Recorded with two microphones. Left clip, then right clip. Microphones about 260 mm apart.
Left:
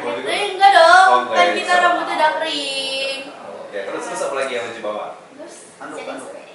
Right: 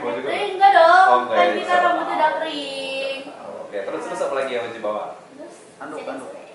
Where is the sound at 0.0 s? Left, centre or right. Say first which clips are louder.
Left 2 dB; centre.